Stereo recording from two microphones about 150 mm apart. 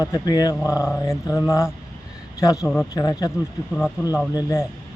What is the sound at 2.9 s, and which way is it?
Speech, 25° left (ahead or behind).